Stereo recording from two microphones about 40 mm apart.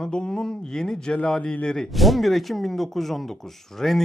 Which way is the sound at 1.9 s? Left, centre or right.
Centre.